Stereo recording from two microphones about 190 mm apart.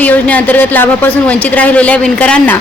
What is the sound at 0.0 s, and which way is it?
Speech, 10° left (ahead or behind).